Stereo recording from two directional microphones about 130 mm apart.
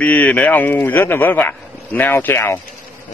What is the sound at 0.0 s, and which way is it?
A man's voice, 10° left (ahead or behind).